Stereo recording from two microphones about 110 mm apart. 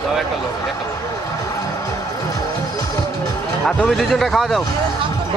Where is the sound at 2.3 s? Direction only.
35° left (ahead or behind).